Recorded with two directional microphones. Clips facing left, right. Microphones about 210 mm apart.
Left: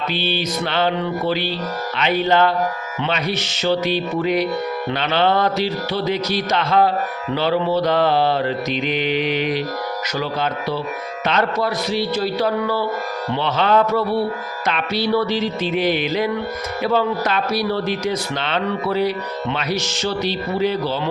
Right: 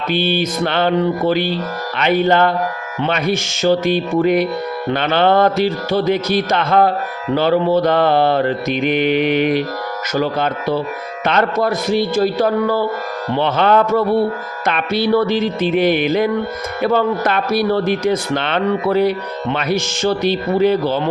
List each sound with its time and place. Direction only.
0.1 s speech: 50° right (ahead or behind)